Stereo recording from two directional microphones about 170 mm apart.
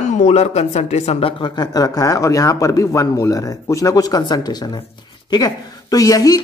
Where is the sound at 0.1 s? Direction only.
40° left (ahead or behind).